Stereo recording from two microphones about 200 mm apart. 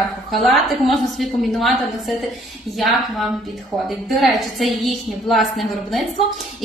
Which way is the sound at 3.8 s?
Centre (ahead or behind).